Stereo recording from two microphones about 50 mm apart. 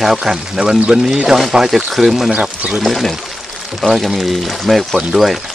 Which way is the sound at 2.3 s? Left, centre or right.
Right.